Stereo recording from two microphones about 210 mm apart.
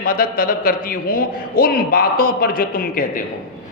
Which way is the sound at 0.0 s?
45° left (ahead or behind).